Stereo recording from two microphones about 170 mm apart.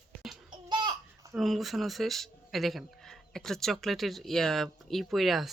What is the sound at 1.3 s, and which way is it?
Speech, centre (ahead or behind).